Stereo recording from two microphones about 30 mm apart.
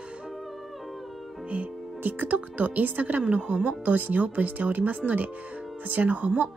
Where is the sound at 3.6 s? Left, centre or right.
Right.